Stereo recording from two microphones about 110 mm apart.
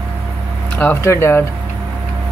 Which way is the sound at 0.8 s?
20° left (ahead or behind).